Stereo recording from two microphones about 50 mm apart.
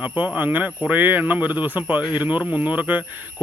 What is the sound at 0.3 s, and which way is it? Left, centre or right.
Speech, right.